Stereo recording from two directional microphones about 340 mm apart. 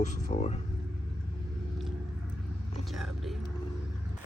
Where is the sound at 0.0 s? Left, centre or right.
Left.